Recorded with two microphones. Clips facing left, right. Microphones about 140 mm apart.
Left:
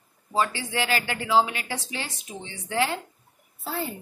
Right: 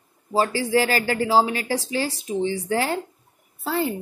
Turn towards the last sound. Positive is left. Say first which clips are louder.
# right 7 dB
turn(degrees=-80)